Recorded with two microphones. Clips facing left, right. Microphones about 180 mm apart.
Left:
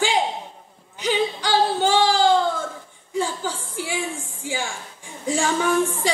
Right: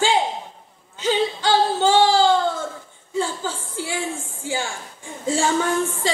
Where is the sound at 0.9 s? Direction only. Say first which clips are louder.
Right 1 dB; 15° left (ahead or behind).